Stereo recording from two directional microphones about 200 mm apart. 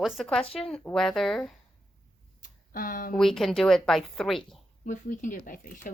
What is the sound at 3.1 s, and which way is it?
A woman's voice, centre (ahead or behind).